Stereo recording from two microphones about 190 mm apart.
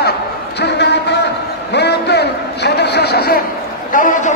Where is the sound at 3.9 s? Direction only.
45° left (ahead or behind).